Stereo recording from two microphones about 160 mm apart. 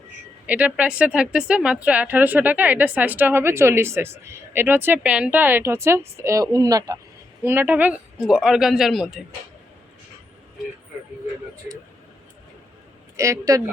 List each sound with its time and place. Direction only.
0.4 s a woman's voice: 10° right (ahead or behind)
13.1 s a man's voice: 20° right (ahead or behind)